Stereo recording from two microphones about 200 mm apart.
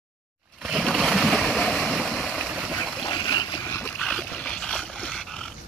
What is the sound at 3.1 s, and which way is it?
Boat, 20° left (ahead or behind).